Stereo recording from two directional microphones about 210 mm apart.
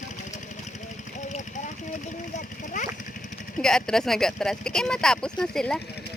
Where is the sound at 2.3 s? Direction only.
35° left (ahead or behind).